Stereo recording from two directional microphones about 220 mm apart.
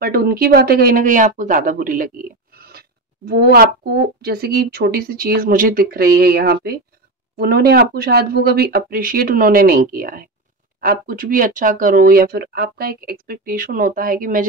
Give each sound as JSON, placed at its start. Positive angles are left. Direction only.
{"t": 0.0, "sound": "speech", "side_deg": -45}
{"t": 2.5, "sound": "a sound", "side_deg": -45}
{"t": 4.2, "sound": "speech", "side_deg": -45}